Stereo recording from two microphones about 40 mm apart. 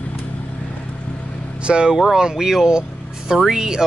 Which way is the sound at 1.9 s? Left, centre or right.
Centre.